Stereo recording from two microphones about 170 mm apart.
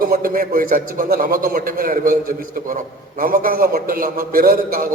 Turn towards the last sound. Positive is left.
turn(degrees=-55)  # may be behind; listen again after turning